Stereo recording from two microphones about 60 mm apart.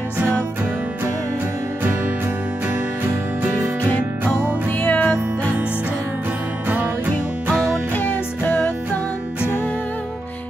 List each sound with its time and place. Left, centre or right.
4.8 s music: left
7.9 s music: left